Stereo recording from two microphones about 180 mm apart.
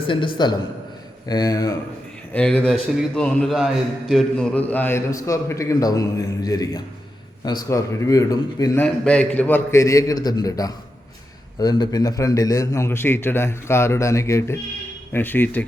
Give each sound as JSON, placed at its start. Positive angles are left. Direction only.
{"t": 0.1, "sound": "a man's voice", "side_deg": 25}
{"t": 2.3, "sound": "a man's voice", "side_deg": 5}
{"t": 8.8, "sound": "a man's voice", "side_deg": 5}